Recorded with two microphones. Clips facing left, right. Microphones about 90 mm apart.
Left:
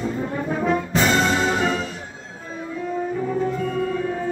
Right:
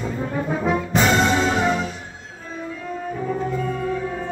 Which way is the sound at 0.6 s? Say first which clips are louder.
Even; 5° right (ahead or behind).